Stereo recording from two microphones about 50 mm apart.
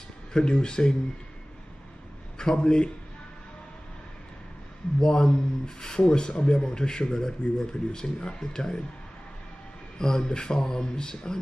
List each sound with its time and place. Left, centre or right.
0.3 s speech: centre
2.3 s a man's voice: centre
5.0 s speech: centre
9.9 s speech: centre